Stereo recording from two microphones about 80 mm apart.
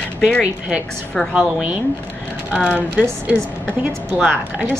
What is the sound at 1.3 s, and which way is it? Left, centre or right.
Speech, centre.